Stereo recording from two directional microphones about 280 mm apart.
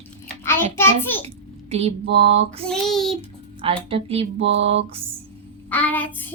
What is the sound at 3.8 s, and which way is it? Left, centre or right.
Speech, right.